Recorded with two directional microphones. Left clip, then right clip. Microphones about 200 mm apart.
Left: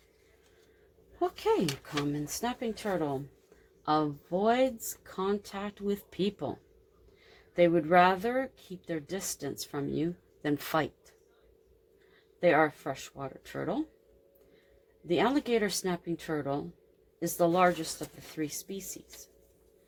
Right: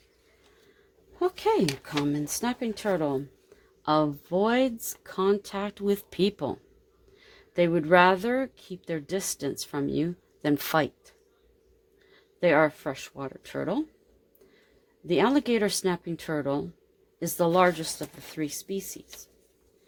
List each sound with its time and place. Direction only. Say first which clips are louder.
1.2 s speech: right 4 dB; 50° right (ahead or behind)
12.4 s speech: right 3 dB; 50° right (ahead or behind)
15.0 s speech: right 4 dB; 50° right (ahead or behind)